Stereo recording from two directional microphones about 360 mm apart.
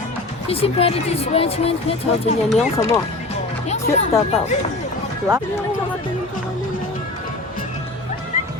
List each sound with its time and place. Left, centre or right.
0.4 s speech: centre
2.5 s speech: centre
3.7 s music: centre
4.1 s speech: centre